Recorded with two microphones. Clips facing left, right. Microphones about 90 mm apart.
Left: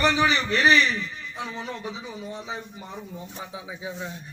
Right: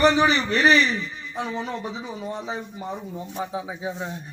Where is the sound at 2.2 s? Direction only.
35° right (ahead or behind).